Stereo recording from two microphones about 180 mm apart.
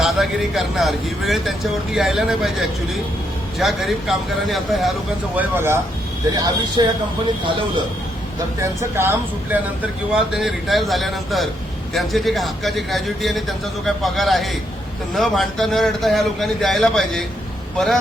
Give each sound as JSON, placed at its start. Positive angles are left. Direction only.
{"t": 0.0, "sound": "speech", "side_deg": 0}
{"t": 5.4, "sound": "a man's voice", "side_deg": -10}
{"t": 8.6, "sound": "speech", "side_deg": -15}